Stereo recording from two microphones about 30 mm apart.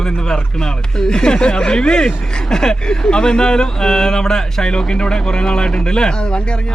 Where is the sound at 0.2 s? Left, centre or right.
Left.